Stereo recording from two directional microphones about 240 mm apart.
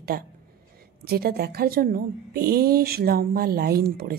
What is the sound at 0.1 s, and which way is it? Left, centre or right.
A woman's voice, right.